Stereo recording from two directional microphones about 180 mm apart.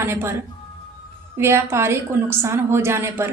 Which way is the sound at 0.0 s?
15° right (ahead or behind).